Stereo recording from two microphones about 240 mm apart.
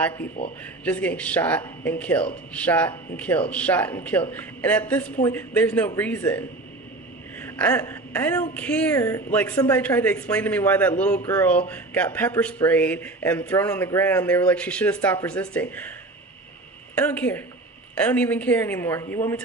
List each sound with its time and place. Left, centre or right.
0.4 s speech: left
0.9 s a woman's voice: centre
11.1 s speech: left
11.3 s a woman's voice: centre
16.9 s a woman's voice: centre